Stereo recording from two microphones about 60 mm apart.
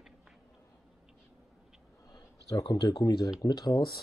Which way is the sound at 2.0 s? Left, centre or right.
Left.